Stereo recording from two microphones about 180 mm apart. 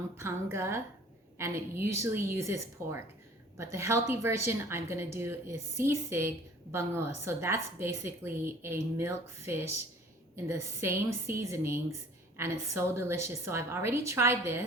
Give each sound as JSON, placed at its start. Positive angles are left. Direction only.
{"t": 0.2, "sound": "a woman's voice", "side_deg": -15}